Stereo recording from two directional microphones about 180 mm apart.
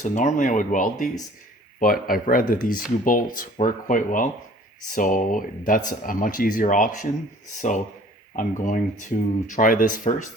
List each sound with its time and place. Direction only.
0.0 s speech: 40° left (ahead or behind)